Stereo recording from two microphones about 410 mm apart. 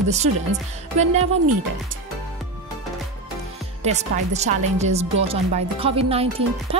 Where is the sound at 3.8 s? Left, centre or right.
Centre.